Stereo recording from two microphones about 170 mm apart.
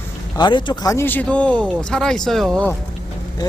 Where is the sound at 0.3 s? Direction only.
25° left (ahead or behind); by 2.6 s centre (ahead or behind).